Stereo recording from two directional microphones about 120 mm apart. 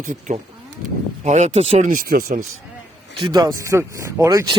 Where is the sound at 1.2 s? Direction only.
75° right (ahead or behind).